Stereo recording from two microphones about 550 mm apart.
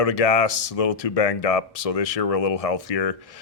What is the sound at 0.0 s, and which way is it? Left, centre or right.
Speech, left.